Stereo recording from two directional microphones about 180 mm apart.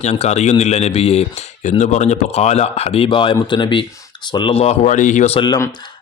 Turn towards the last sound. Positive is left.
turn(degrees=25)  # may be behind; listen again after turning